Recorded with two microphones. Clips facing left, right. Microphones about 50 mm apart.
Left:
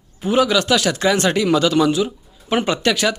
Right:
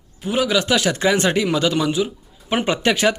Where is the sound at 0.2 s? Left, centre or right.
Centre.